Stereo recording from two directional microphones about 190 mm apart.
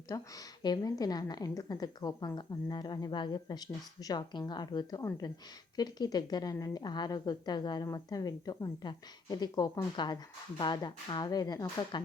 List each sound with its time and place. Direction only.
0.1 s a woman's voice: 15° left (ahead or behind)